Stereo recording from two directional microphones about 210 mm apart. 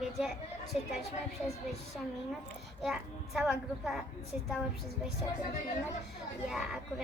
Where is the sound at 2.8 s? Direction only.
Centre (ahead or behind).